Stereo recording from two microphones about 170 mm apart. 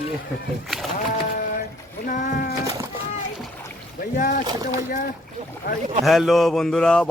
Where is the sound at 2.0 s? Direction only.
50° left (ahead or behind).